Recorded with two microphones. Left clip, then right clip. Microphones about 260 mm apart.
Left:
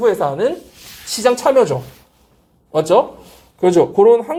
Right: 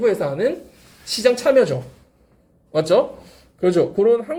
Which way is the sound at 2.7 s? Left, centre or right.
Left.